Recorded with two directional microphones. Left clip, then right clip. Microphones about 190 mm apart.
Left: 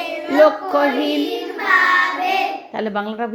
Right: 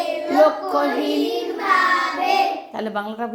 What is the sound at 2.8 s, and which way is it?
Speech, 25° left (ahead or behind).